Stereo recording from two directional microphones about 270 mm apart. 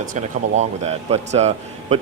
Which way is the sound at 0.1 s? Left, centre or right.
Right.